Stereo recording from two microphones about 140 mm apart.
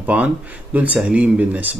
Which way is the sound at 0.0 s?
10° right (ahead or behind).